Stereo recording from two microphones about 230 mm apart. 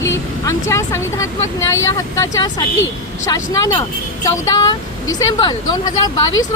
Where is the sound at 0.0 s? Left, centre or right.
Centre.